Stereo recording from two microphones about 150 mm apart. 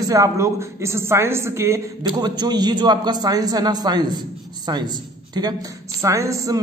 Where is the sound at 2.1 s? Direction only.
30° right (ahead or behind).